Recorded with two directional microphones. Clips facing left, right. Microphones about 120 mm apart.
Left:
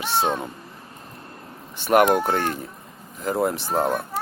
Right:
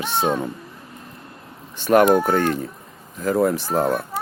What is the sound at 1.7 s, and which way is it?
Speech, 15° left (ahead or behind).